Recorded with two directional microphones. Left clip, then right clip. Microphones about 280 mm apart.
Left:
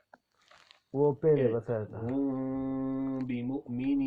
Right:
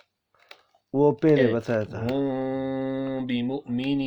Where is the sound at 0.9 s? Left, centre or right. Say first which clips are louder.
Right 6 dB; right.